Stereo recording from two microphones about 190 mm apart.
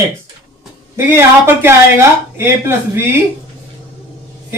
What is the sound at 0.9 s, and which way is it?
Speech, 15° right (ahead or behind).